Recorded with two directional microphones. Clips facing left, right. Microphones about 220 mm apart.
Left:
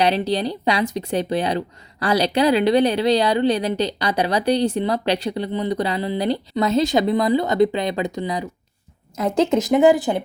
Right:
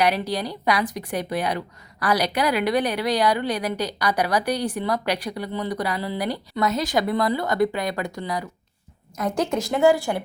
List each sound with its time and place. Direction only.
0.0 s speech: 25° left (ahead or behind)